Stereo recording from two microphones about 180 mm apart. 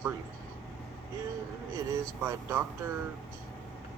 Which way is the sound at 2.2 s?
15° right (ahead or behind).